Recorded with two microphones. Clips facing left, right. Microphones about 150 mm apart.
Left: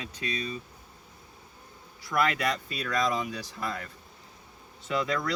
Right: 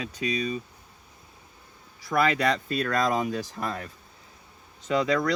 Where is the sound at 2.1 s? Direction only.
45° right (ahead or behind).